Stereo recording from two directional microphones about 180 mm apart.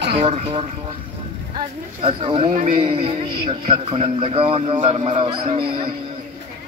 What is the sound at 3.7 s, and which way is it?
A man's voice, 30° right (ahead or behind).